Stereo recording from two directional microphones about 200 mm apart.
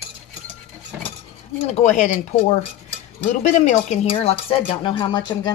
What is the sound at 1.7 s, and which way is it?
Speech, 35° left (ahead or behind).